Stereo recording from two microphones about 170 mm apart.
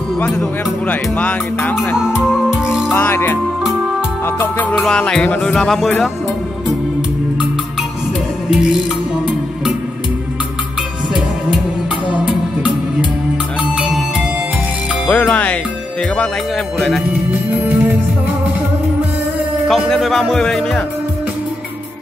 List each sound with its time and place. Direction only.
0.8 s speech: 10° left (ahead or behind)
2.0 s music: 5° right (ahead or behind)
2.9 s speech: 10° left (ahead or behind)
4.4 s music: 10° left (ahead or behind)
15.0 s speech: 10° left (ahead or behind)
17.6 s music: 10° right (ahead or behind)
19.7 s music: centre (ahead or behind)